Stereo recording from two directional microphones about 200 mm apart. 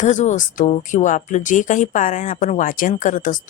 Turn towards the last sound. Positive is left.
turn(degrees=40)  # may be behind; listen again after turning